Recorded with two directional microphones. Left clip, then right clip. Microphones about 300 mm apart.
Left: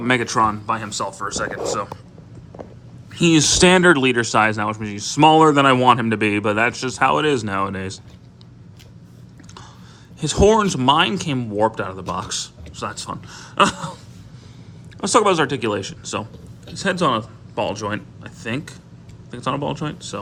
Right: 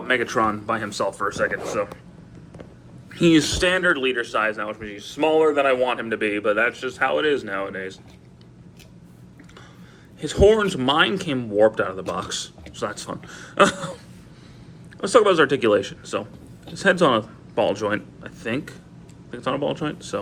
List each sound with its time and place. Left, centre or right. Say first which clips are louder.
0.0 s speech: left 3 dB; centre
3.1 s speech: left 2 dB; centre
10.2 s speech: left 1 dB; centre
15.0 s speech: even; centre